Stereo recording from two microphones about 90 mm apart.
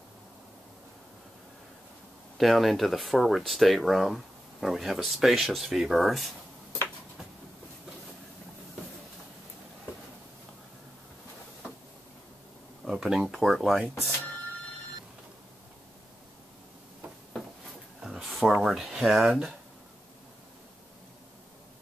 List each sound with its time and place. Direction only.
2.3 s speech: centre (ahead or behind)
12.8 s speech: 5° right (ahead or behind)
18.0 s a sound: centre (ahead or behind)
18.6 s speech: 5° right (ahead or behind)